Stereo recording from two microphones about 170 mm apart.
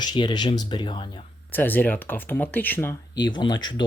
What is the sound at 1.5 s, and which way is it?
Speech, 10° left (ahead or behind).